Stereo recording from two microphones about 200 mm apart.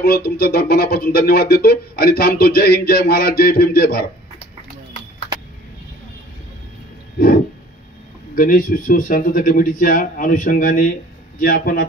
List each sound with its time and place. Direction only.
0.0 s speech: 50° left (ahead or behind)
8.4 s speech: 45° left (ahead or behind)